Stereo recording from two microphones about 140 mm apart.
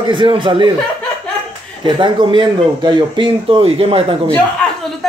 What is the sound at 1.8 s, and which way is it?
Speech, 35° right (ahead or behind).